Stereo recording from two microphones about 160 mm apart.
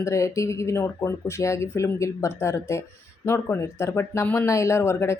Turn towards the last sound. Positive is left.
turn(degrees=15)  # may be behind; listen again after turning